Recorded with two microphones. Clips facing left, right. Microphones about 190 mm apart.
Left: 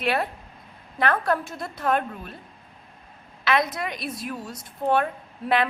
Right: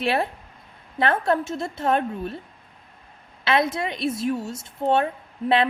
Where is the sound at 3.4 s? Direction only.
25° right (ahead or behind).